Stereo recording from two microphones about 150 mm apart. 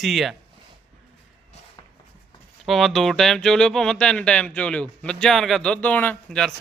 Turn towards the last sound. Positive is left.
turn(degrees=5)  # may be behind; listen again after turning